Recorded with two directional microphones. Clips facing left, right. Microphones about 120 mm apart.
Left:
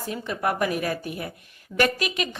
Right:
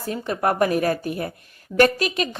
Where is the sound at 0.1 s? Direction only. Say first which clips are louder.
Right 4 dB; 45° right (ahead or behind).